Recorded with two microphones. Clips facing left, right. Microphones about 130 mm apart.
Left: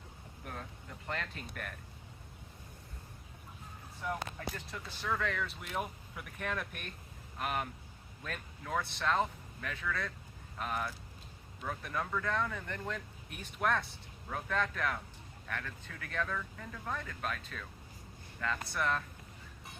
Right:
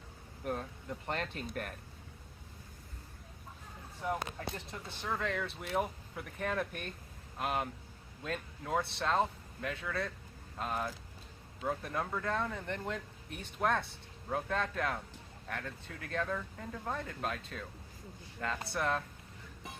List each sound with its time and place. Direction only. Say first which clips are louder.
1.0 s speech: right 2 dB; 35° right (ahead or behind)
4.0 s speech: right 2 dB; 25° right (ahead or behind)